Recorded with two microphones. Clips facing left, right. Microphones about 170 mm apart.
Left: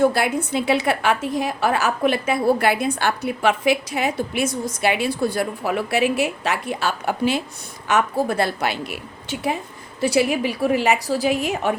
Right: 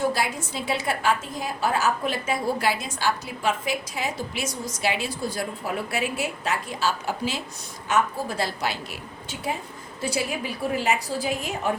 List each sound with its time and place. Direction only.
0.0 s a woman's voice: 60° left (ahead or behind)